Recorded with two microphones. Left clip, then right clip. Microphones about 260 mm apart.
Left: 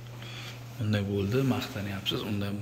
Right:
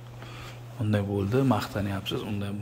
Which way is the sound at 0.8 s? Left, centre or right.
Centre.